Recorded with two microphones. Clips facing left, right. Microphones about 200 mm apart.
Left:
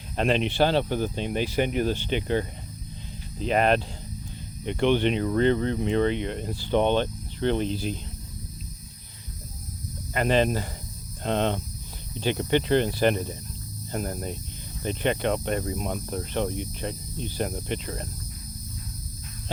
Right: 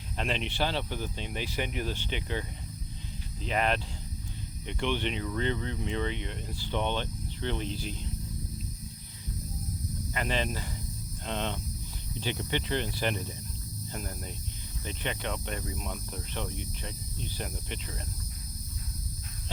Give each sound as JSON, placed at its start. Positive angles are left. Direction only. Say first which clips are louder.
{"t": 0.2, "sound": "speech", "louder": "left 9 dB", "side_deg": 45}
{"t": 4.6, "sound": "speech", "louder": "left 9 dB", "side_deg": 55}
{"t": 4.9, "sound": "speech", "louder": "left 9 dB", "side_deg": 40}
{"t": 10.2, "sound": "speech", "louder": "left 10 dB", "side_deg": 60}
{"t": 12.6, "sound": "speech", "louder": "left 10 dB", "side_deg": 45}